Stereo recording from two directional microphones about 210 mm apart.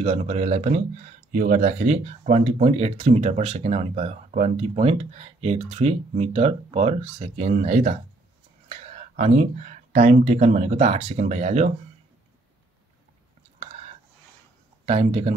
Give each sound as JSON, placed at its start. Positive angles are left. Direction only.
{"t": 0.0, "sound": "speech", "side_deg": -30}
{"t": 14.9, "sound": "speech", "side_deg": -30}